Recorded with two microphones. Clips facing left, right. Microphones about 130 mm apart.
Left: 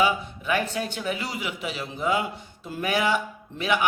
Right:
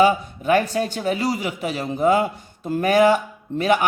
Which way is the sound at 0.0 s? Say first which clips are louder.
Right 7 dB; 40° right (ahead or behind).